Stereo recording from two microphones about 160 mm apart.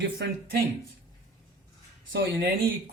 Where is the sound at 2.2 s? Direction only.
90° right.